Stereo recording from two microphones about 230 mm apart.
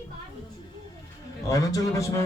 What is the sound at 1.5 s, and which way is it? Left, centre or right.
Speech, centre.